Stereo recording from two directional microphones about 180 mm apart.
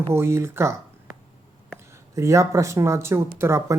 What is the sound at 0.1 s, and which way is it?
Speech, 15° right (ahead or behind).